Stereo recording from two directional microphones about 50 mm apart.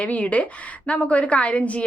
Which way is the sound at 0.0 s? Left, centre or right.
Left.